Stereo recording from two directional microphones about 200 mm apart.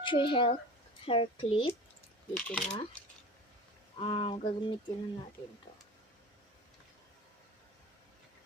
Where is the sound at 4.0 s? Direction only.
25° left (ahead or behind).